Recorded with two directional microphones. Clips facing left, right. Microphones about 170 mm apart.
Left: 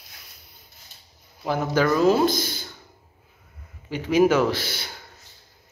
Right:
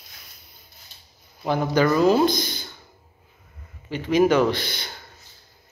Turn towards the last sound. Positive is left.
turn(degrees=5)  # may be behind; listen again after turning